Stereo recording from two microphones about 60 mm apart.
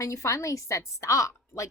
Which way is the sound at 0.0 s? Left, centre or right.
Left.